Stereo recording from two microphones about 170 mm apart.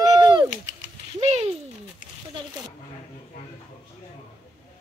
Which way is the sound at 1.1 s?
40° right (ahead or behind).